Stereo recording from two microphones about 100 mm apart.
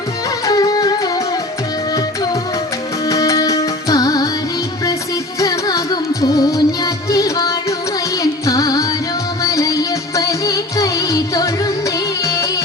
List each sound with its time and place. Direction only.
0.4 s music: 40° left (ahead or behind)
3.1 s music: 35° left (ahead or behind)
5.4 s music: 35° left (ahead or behind)